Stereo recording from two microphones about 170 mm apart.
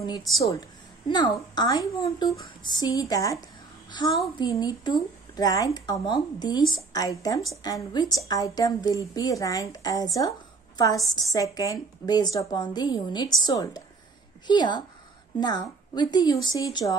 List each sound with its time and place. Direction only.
1.0 s a woman's voice: 25° left (ahead or behind)